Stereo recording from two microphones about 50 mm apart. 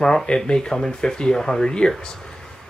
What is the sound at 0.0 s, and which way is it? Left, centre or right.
Speech, centre.